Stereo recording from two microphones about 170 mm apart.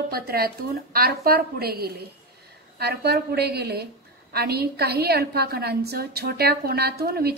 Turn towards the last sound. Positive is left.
turn(degrees=-70)  # may be behind; listen again after turning